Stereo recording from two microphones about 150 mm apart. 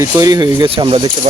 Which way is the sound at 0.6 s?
35° right (ahead or behind).